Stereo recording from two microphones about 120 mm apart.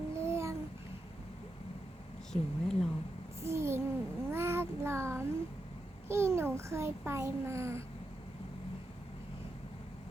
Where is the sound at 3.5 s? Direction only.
20° right (ahead or behind).